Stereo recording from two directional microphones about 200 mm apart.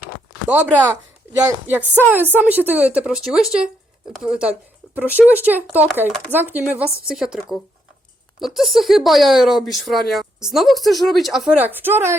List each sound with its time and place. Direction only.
0.4 s speech: 10° right (ahead or behind)